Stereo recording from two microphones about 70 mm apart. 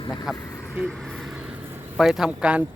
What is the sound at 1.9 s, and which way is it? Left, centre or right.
Speech, centre.